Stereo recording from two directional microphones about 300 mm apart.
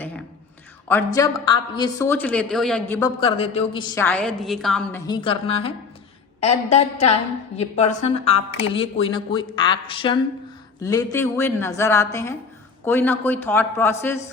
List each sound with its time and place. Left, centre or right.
0.9 s a woman's voice: centre
3.2 s a woman's voice: centre